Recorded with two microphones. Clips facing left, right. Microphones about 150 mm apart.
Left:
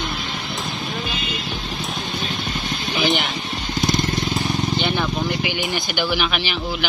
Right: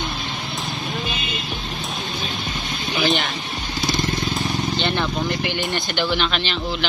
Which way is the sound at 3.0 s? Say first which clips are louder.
Even; 20° left (ahead or behind).